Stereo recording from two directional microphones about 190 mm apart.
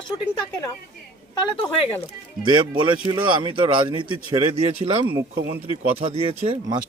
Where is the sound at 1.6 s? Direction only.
30° left (ahead or behind).